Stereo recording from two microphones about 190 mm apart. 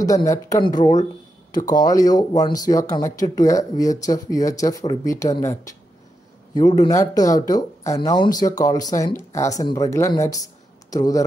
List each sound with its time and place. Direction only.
0.0 s speech: 20° left (ahead or behind)